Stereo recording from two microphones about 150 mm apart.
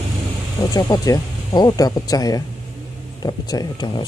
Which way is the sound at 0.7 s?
25° left (ahead or behind).